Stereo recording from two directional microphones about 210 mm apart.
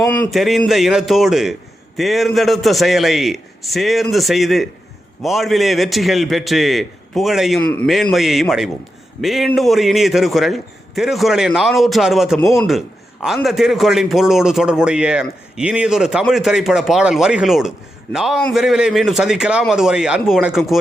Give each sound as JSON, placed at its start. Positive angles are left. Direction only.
{"t": 0.1, "sound": "a man's voice", "side_deg": 5}